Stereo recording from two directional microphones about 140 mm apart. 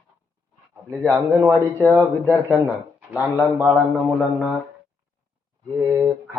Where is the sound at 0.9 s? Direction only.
15° right (ahead or behind).